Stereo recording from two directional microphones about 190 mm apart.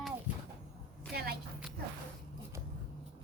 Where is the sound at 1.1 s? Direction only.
55° right (ahead or behind).